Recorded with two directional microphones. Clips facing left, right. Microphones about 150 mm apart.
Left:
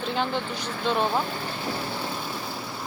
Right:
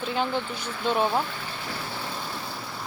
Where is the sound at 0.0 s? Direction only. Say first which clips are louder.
Even; 5° right (ahead or behind).